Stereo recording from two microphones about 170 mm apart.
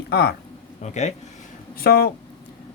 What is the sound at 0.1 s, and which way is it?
Speech, 70° left (ahead or behind).